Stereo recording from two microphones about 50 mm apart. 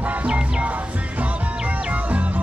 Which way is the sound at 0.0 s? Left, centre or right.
Right.